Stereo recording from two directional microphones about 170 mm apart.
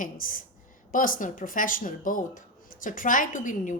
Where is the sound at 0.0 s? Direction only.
55° left (ahead or behind).